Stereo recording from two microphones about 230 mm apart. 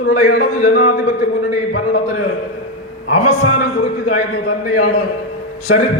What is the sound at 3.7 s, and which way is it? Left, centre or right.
Speech, left.